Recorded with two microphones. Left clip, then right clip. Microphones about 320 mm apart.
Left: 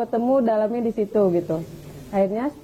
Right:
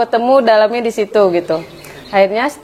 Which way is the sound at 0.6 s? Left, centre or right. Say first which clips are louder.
Right 11 dB; centre.